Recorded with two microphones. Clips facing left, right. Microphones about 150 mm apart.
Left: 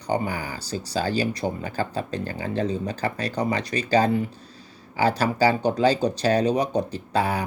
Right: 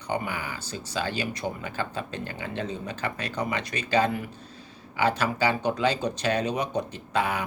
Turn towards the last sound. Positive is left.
turn(degrees=35)  # may be behind; listen again after turning